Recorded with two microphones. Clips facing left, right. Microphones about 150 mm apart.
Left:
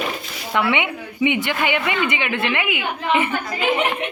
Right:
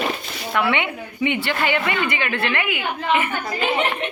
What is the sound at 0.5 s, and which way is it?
A woman's voice, 15° left (ahead or behind).